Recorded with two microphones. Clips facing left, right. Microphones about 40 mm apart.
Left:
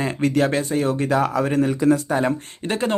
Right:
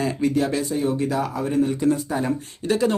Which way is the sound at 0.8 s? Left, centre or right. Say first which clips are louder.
Left 4 dB; left.